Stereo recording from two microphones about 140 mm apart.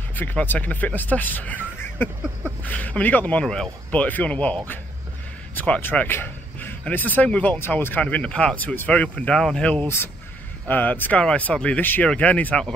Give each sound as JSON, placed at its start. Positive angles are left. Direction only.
{"t": 0.1, "sound": "speech", "side_deg": 15}